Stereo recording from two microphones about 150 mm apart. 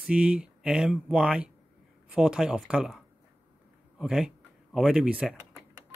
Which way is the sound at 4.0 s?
5° right (ahead or behind).